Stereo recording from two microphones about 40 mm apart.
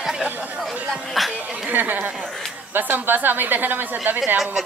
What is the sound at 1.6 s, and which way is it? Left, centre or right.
A woman's voice, right.